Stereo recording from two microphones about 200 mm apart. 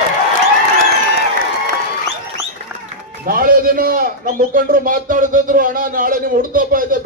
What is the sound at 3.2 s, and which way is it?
A man's voice, 45° right (ahead or behind).